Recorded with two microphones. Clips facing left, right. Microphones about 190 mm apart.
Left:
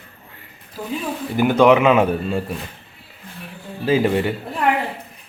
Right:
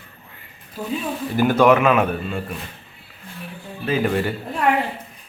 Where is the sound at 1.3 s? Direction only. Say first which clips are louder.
Left 2 dB; 15° left (ahead or behind); by 2.5 s 30° left (ahead or behind).